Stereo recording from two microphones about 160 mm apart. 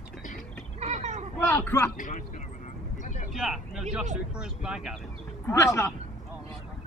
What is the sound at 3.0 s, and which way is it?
Vehicle, 50° left (ahead or behind).